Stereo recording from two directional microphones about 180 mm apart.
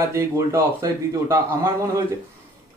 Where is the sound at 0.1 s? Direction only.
15° right (ahead or behind).